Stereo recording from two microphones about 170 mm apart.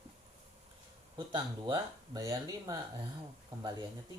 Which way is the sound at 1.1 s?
25° right (ahead or behind).